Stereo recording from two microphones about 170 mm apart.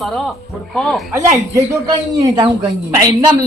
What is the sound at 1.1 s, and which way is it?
Speech, 20° right (ahead or behind).